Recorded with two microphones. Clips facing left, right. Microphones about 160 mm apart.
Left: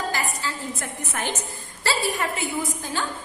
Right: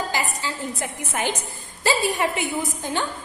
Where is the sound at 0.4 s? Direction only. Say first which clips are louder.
Right 2 dB; 15° right (ahead or behind).